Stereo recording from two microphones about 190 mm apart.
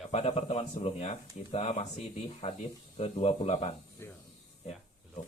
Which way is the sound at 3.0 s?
30° left (ahead or behind).